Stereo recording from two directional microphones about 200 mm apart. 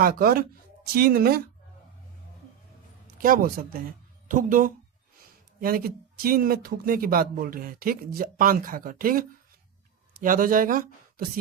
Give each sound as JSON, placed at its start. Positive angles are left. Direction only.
{"t": 0.0, "sound": "speech", "side_deg": -45}
{"t": 3.2, "sound": "speech", "side_deg": -45}